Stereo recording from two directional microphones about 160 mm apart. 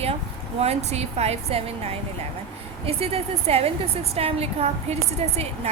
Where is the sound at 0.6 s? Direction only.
40° right (ahead or behind).